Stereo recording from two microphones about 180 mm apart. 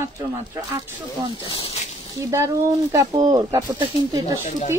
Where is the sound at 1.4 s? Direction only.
30° left (ahead or behind).